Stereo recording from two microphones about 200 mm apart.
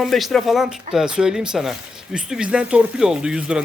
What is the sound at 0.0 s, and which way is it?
Speech, centre (ahead or behind).